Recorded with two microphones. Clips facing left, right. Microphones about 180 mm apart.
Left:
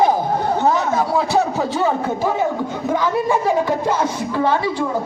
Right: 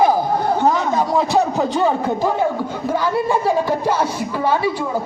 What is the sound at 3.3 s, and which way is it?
A man's voice, 10° right (ahead or behind).